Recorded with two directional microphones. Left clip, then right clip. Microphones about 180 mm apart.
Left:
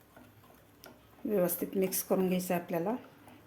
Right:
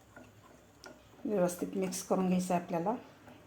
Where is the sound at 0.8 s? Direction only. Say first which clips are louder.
Left 1 dB; 20° left (ahead or behind).